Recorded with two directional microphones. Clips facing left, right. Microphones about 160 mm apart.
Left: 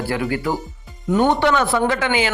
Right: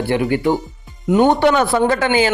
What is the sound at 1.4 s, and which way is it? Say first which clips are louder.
Speech: right 3 dB; 40° right (ahead or behind).